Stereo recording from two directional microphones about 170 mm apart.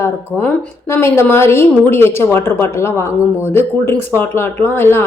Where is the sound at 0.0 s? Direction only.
10° left (ahead or behind).